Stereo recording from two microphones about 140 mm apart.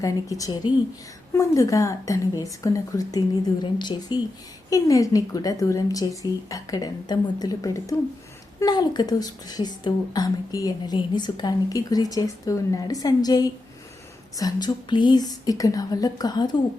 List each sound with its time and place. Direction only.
0.0 s a woman's voice: 25° left (ahead or behind)